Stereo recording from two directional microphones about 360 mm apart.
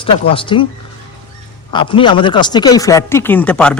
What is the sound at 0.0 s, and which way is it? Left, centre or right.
Speech, centre.